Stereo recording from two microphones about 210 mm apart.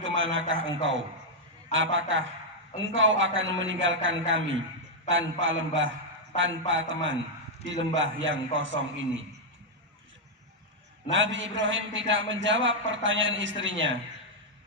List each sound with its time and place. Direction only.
0.0 s a man's voice: 65° right (ahead or behind)
11.1 s a man's voice: 60° right (ahead or behind)